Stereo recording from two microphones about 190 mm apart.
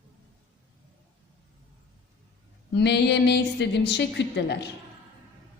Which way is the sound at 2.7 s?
60° left (ahead or behind).